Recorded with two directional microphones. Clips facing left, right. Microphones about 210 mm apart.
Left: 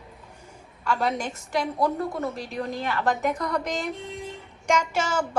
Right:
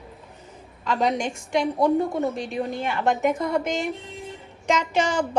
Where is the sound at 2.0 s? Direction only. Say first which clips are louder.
Right 4 dB; 20° right (ahead or behind).